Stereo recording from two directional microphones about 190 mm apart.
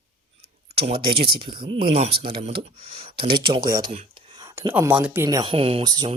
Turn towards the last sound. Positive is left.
turn(degrees=-20)  # may be behind; listen again after turning